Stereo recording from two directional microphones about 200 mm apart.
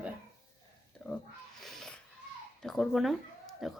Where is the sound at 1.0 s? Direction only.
5° left (ahead or behind).